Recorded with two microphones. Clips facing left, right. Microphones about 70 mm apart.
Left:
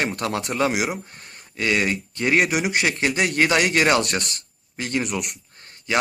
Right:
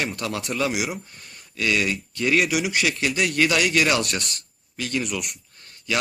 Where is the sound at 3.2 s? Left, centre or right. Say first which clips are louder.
Left 1 dB; left.